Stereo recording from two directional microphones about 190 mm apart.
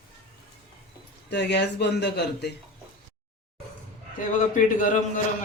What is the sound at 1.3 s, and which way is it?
Speech, 65° left (ahead or behind).